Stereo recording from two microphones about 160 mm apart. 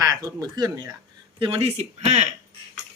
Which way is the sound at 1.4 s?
40° right (ahead or behind).